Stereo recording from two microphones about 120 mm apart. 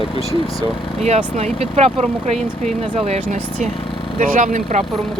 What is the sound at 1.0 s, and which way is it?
Speech, 70° right (ahead or behind).